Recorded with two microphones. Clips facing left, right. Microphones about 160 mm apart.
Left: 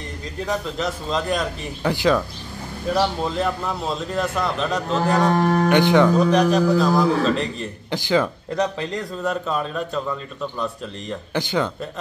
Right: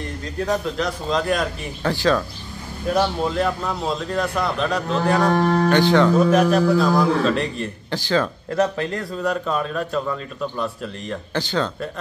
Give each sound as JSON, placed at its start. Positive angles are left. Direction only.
{"t": 0.7, "sound": "a man's voice", "side_deg": 0}
{"t": 1.8, "sound": "speech", "side_deg": 15}
{"t": 2.9, "sound": "a man's voice", "side_deg": 0}
{"t": 5.7, "sound": "speech", "side_deg": 15}
{"t": 6.1, "sound": "a man's voice", "side_deg": -5}
{"t": 7.9, "sound": "speech", "side_deg": 15}
{"t": 8.5, "sound": "a man's voice", "side_deg": 0}
{"t": 11.3, "sound": "speech", "side_deg": 15}